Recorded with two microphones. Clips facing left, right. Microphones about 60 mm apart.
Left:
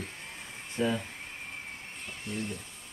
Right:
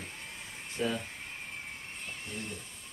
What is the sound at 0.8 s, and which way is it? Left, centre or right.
Speech, left.